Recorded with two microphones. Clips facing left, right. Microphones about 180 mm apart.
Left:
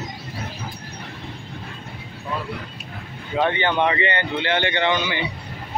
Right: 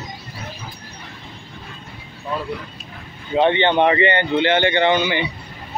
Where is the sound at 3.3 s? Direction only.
25° right (ahead or behind).